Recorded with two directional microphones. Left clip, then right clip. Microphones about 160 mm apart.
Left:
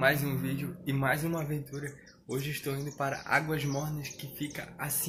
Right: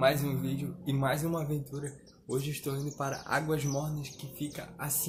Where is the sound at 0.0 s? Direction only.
5° right (ahead or behind).